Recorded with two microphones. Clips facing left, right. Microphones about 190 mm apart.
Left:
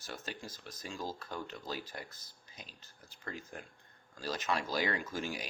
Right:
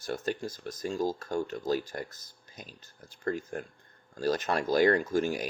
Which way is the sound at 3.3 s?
50° right (ahead or behind).